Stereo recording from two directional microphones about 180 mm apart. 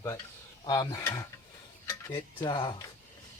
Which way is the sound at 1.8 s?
20° left (ahead or behind).